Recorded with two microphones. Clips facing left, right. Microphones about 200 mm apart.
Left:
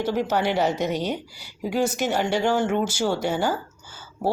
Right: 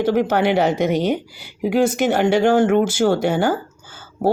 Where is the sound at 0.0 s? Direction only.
55° right (ahead or behind).